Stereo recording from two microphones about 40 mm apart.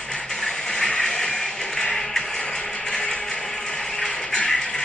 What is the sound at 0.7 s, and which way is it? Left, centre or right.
Music, centre.